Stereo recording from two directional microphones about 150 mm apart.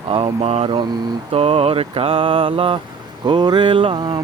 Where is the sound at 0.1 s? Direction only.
40° right (ahead or behind).